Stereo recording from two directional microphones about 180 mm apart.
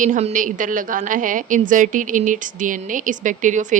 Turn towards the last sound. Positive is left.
turn(degrees=-45)  # may be behind; listen again after turning